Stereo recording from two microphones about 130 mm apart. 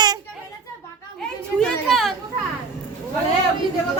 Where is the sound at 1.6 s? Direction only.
Centre (ahead or behind).